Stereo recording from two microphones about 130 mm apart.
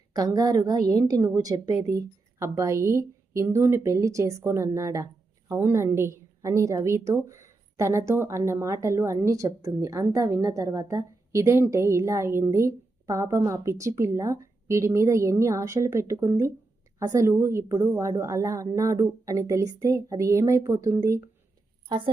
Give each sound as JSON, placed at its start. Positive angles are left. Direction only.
{"t": 0.1, "sound": "a woman's voice", "side_deg": -30}
{"t": 21.8, "sound": "a woman's voice", "side_deg": -40}